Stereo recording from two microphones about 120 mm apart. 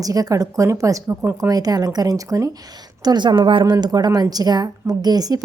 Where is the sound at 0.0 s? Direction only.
30° right (ahead or behind).